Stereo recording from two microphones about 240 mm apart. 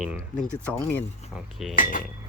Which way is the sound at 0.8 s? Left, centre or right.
Centre.